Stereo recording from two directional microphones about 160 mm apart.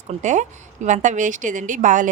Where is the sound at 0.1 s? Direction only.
50° right (ahead or behind).